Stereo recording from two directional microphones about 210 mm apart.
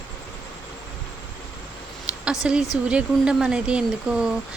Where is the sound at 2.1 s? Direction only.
5° right (ahead or behind).